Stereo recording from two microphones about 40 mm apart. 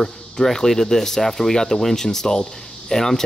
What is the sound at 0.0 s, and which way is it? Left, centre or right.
A man's voice, centre.